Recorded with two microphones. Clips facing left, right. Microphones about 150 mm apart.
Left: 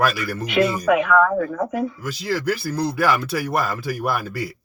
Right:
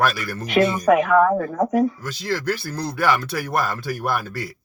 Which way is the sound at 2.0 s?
10° left (ahead or behind).